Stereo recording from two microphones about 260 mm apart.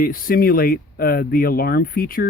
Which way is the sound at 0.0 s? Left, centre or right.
Left.